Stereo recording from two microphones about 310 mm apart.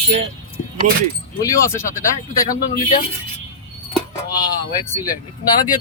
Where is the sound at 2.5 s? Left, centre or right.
Left.